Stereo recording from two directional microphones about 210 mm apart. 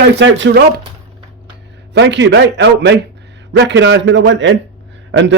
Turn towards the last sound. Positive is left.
turn(degrees=-60)  # may be behind; listen again after turning